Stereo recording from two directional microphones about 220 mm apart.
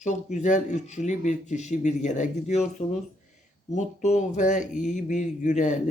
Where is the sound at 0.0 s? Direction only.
30° left (ahead or behind).